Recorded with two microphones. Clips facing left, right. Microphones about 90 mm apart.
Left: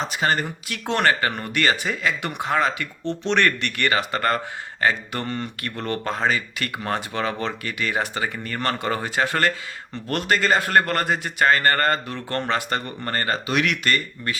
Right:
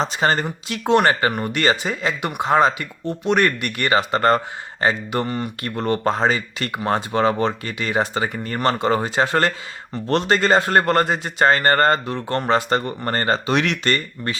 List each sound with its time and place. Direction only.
0.0 s a man's voice: 30° right (ahead or behind)
0.4 s a man's voice: 20° right (ahead or behind)